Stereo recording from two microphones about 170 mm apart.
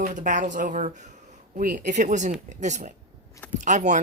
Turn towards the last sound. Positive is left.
turn(degrees=-45)  # may be behind; listen again after turning